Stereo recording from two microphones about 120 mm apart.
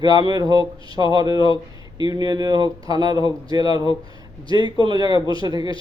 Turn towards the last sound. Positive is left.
turn(degrees=-35)  # may be behind; listen again after turning